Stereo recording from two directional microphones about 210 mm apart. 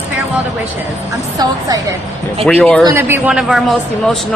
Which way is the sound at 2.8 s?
15° right (ahead or behind).